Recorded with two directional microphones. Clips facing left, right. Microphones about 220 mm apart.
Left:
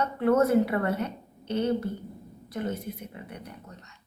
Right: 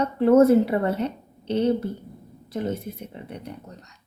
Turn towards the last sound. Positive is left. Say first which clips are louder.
# right 3 dB
turn(degrees=-25)  # may be behind; listen again after turning